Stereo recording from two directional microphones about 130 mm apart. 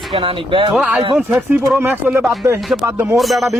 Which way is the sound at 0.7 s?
5° right (ahead or behind).